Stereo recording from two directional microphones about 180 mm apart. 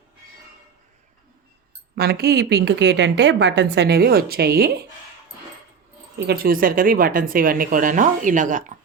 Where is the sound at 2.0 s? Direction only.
60° right (ahead or behind).